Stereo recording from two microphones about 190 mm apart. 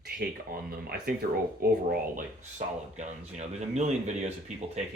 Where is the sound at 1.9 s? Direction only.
45° right (ahead or behind).